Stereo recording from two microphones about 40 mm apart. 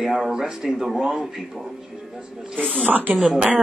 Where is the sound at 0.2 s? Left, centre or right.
Centre.